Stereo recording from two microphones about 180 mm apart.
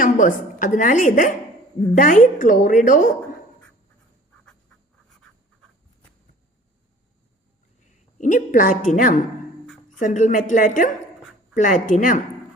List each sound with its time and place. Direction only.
0.0 s a woman's voice: 45° left (ahead or behind)
8.2 s a woman's voice: 45° left (ahead or behind)